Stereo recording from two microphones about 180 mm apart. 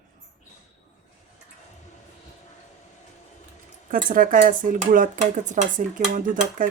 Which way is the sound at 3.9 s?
50° right (ahead or behind).